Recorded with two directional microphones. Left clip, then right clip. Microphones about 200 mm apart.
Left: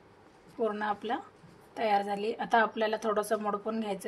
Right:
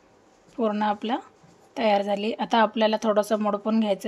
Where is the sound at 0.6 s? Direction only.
55° right (ahead or behind).